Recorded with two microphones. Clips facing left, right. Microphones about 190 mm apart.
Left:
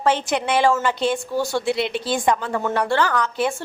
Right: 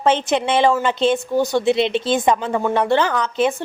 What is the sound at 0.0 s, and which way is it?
A woman's voice, 20° right (ahead or behind).